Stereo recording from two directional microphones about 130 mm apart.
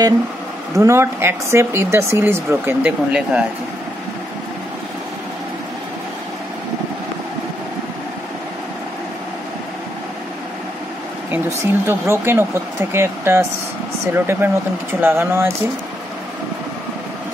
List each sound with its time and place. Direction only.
0.7 s speech: 20° right (ahead or behind)
11.2 s speech: 15° right (ahead or behind)